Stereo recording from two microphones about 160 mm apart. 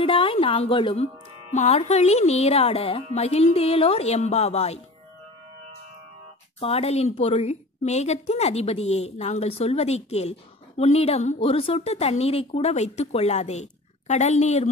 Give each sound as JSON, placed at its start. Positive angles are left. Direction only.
{"t": 0.0, "sound": "speech", "side_deg": 35}
{"t": 6.6, "sound": "speech", "side_deg": 40}